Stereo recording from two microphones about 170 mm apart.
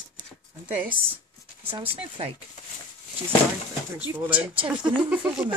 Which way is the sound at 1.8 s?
30° right (ahead or behind).